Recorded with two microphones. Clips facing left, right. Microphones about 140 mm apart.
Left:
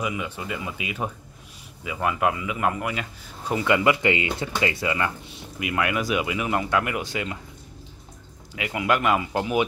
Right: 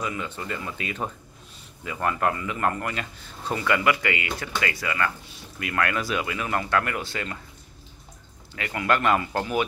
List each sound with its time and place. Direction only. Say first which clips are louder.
0.0 s speech: left 2 dB; 10° left (ahead or behind)
8.5 s speech: left 1 dB; 10° left (ahead or behind)